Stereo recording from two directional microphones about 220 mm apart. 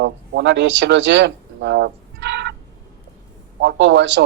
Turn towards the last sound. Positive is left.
turn(degrees=-55)  # may be behind; listen again after turning